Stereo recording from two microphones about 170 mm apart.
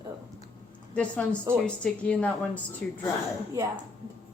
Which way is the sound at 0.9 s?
5° left (ahead or behind).